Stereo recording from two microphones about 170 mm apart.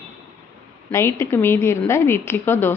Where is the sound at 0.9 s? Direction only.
15° left (ahead or behind).